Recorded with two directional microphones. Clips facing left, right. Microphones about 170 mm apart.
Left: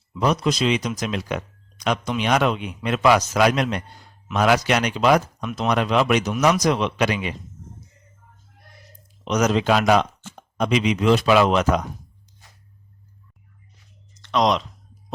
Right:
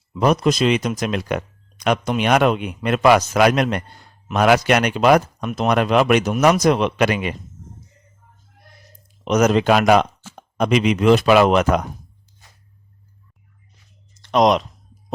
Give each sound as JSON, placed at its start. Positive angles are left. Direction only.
{"t": 0.1, "sound": "speech", "side_deg": -55}
{"t": 9.2, "sound": "speech", "side_deg": -55}
{"t": 14.3, "sound": "speech", "side_deg": -50}